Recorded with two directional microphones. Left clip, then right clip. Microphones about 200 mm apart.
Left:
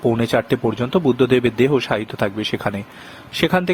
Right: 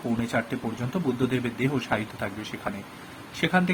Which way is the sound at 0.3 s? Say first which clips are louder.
Left 10 dB; 45° left (ahead or behind).